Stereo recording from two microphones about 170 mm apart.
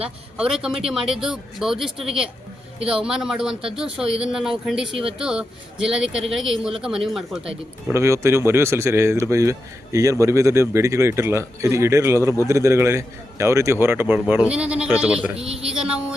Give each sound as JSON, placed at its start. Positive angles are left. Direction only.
{"t": 0.0, "sound": "speech", "side_deg": -5}
{"t": 7.9, "sound": "speech", "side_deg": -15}